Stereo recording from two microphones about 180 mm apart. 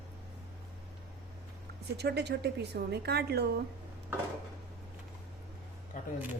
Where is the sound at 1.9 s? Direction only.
65° right (ahead or behind).